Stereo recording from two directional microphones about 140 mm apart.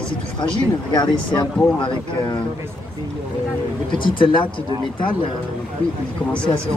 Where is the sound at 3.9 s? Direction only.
35° left (ahead or behind).